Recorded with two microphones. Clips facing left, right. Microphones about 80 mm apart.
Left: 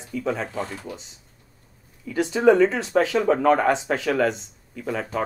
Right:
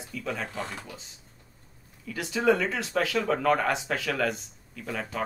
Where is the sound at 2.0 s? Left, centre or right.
Left.